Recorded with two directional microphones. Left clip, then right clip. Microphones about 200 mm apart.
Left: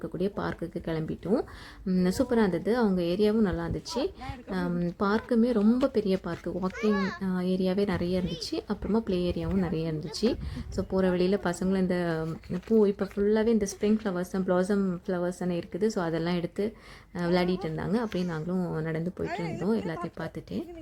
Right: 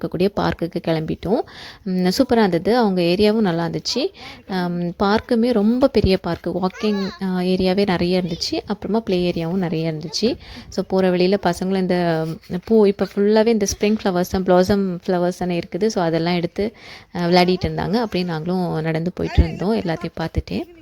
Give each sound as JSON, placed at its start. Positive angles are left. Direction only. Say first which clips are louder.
{"t": 0.0, "sound": "speech", "louder": "right 11 dB", "side_deg": -30}